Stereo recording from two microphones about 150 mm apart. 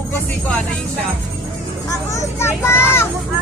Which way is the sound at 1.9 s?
20° left (ahead or behind).